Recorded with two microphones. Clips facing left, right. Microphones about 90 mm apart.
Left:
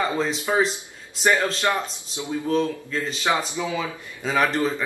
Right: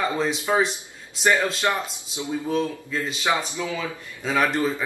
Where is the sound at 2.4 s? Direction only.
10° right (ahead or behind).